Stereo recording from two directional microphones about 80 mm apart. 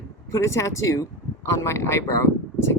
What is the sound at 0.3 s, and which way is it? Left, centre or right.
Speech, left.